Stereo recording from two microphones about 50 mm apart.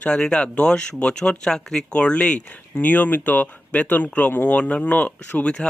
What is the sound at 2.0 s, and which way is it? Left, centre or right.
Speech, left.